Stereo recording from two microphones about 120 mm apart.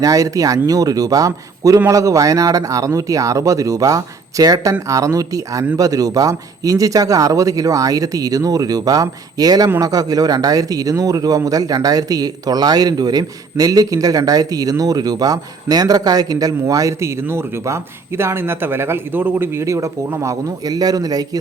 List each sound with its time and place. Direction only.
0.0 s speech: 30° right (ahead or behind)
9.6 s speech: 20° right (ahead or behind)
9.9 s speech: 30° right (ahead or behind)